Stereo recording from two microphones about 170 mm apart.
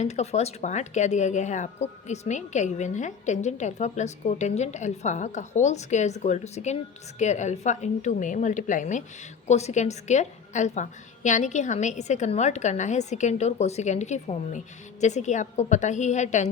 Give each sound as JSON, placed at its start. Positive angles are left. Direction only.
{"t": 0.0, "sound": "a woman's voice", "side_deg": 40}